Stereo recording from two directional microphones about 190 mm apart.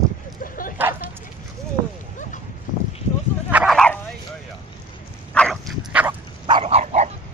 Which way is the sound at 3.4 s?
10° right (ahead or behind).